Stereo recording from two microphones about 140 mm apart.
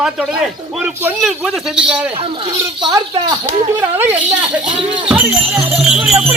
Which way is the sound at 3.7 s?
15° right (ahead or behind).